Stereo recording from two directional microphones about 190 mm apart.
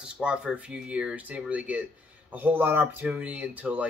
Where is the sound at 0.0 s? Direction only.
5° right (ahead or behind).